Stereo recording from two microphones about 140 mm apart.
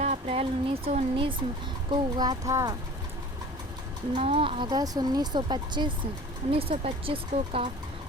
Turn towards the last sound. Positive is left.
turn(degrees=-45)  # may be behind; listen again after turning